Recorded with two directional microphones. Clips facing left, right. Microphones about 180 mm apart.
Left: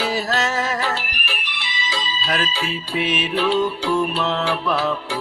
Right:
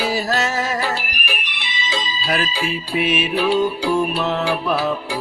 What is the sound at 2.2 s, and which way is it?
Music, 10° right (ahead or behind).